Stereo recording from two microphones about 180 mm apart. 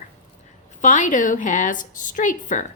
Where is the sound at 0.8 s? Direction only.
45° left (ahead or behind).